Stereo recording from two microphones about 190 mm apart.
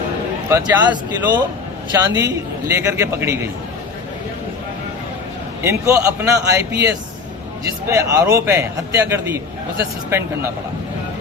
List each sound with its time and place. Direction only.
0.5 s a man's voice: 20° right (ahead or behind)
5.6 s a man's voice: 15° right (ahead or behind)